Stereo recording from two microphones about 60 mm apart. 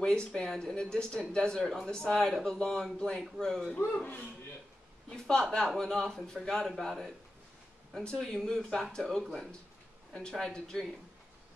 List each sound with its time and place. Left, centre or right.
0.0 s speech: centre
3.7 s speech: left
5.1 s speech: centre